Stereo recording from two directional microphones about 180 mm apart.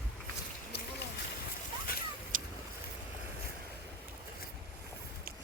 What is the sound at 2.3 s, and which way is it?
Vehicle, 50° right (ahead or behind).